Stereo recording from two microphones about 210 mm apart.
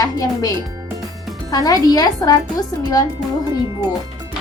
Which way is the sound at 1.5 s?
15° left (ahead or behind).